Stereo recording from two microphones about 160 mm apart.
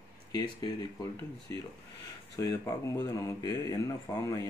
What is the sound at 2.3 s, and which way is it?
Speech, 20° left (ahead or behind).